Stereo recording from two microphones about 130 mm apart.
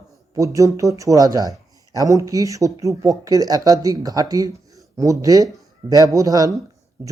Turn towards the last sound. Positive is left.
turn(degrees=-25)  # may be behind; listen again after turning